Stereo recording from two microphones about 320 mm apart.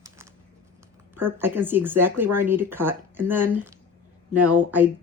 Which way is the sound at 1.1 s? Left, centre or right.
Centre.